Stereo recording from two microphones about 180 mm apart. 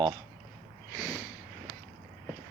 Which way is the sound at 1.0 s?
15° left (ahead or behind).